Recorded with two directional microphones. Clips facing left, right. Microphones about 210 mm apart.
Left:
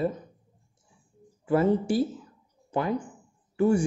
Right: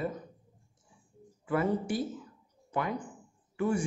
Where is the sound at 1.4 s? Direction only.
30° left (ahead or behind).